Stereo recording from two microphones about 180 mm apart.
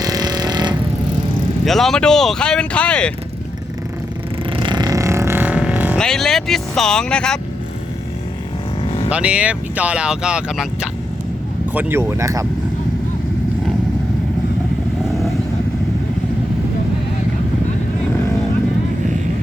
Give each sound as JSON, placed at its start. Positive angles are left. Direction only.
{"t": 0.0, "sound": "vehicle", "side_deg": -20}
{"t": 1.6, "sound": "speech", "side_deg": 0}
{"t": 4.5, "sound": "vehicle", "side_deg": -25}
{"t": 6.0, "sound": "speech", "side_deg": 5}
{"t": 8.8, "sound": "vehicle", "side_deg": 35}
{"t": 9.0, "sound": "speech", "side_deg": -5}